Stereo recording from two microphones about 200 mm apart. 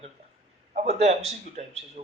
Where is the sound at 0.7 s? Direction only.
35° right (ahead or behind).